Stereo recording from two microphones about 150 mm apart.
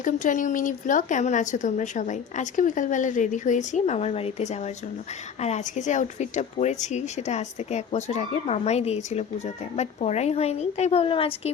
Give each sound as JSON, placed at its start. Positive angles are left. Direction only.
{"t": 0.0, "sound": "speech", "side_deg": 55}